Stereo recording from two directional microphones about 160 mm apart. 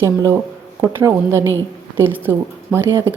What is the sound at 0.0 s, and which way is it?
A woman's voice, 20° right (ahead or behind).